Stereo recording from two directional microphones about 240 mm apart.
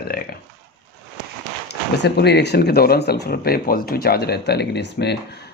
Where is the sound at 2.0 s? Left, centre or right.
Left.